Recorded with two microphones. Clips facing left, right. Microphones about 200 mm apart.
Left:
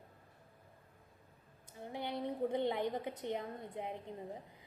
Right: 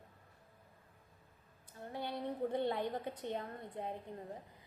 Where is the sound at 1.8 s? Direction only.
15° left (ahead or behind).